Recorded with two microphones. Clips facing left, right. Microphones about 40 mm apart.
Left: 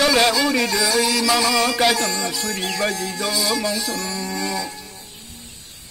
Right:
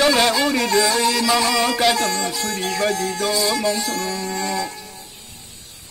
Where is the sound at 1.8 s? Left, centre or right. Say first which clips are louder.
Right 1 dB; centre.